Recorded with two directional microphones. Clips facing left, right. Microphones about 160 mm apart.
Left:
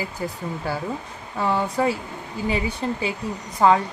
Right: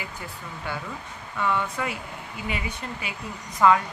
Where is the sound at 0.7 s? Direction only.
35° left (ahead or behind).